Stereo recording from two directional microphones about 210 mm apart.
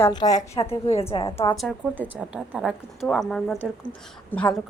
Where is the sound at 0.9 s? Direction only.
30° left (ahead or behind).